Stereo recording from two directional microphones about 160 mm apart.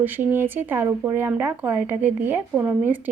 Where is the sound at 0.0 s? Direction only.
10° right (ahead or behind).